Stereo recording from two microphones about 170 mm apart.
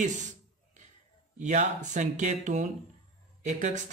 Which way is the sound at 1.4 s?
45° right (ahead or behind).